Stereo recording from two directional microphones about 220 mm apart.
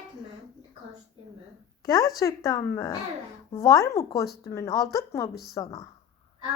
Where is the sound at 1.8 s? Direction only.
15° left (ahead or behind).